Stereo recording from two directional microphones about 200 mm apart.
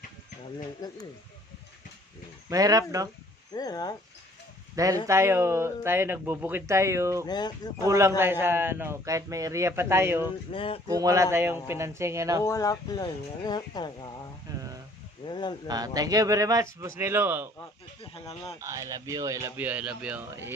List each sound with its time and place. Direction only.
2.5 s speech: 15° right (ahead or behind)
3.5 s speech: 20° left (ahead or behind)
4.7 s speech: 15° right (ahead or behind)
7.3 s speech: 20° left (ahead or behind)
7.9 s speech: 15° right (ahead or behind)
10.5 s speech: 25° left (ahead or behind)
10.8 s speech: 15° right (ahead or behind)
12.4 s speech: 15° left (ahead or behind)
14.5 s a sound: 20° right (ahead or behind)
15.3 s speech: 20° left (ahead or behind)
15.6 s speech: 20° right (ahead or behind)
18.0 s speech: 30° left (ahead or behind)
18.6 s speech: 15° right (ahead or behind)